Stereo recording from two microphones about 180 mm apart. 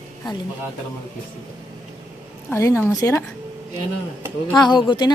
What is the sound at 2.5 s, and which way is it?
Speech, 15° left (ahead or behind).